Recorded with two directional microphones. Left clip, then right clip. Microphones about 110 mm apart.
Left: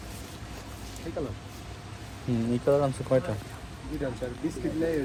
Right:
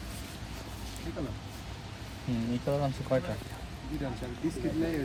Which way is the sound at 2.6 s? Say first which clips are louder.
Left 8 dB; 20° left (ahead or behind).